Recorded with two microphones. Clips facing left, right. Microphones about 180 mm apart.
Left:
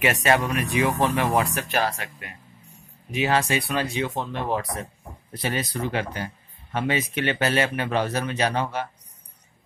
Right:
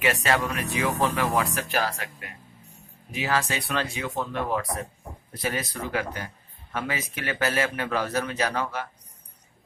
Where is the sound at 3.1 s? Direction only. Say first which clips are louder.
Left 4 dB; 20° left (ahead or behind).